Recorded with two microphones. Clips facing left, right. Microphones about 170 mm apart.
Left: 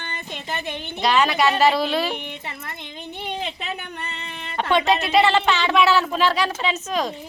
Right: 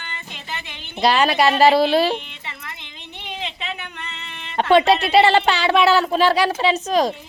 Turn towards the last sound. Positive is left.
turn(degrees=-35)  # may be behind; listen again after turning